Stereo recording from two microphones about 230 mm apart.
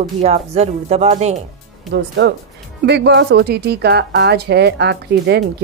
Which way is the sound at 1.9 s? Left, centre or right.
Right.